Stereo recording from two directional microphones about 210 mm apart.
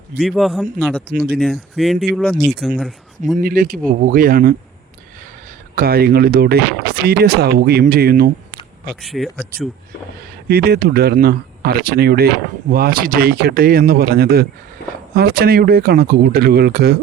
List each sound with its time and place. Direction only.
0.2 s speech: centre (ahead or behind)
3.3 s speech: 40° right (ahead or behind)
5.7 s speech: 45° right (ahead or behind)
9.0 s speech: centre (ahead or behind)
10.5 s speech: 50° right (ahead or behind)